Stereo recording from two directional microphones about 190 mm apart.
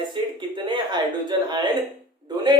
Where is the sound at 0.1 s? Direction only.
25° right (ahead or behind).